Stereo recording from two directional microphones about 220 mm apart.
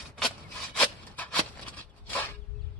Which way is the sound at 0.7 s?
5° left (ahead or behind).